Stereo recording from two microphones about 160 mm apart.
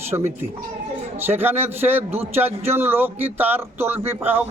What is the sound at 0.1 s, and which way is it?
Speech, 25° right (ahead or behind).